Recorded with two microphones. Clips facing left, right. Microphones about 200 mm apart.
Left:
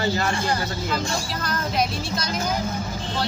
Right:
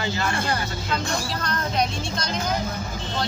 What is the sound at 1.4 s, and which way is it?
Speech, 5° left (ahead or behind).